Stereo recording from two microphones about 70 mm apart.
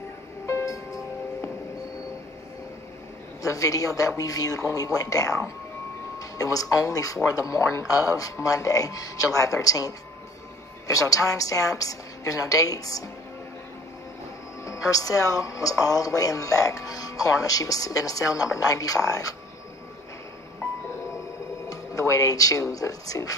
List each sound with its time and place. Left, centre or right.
0.5 s music: left
3.4 s speech: left
14.6 s speech: left
21.6 s speech: left